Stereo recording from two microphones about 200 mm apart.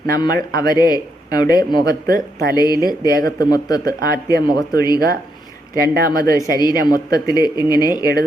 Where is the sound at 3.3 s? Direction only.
20° left (ahead or behind).